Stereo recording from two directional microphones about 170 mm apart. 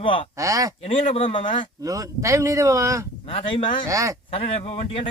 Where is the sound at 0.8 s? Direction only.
35° left (ahead or behind).